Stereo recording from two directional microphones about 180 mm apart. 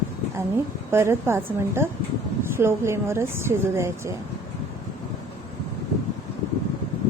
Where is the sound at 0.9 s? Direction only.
15° right (ahead or behind).